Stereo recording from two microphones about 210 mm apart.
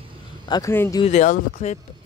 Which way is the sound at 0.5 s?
15° left (ahead or behind).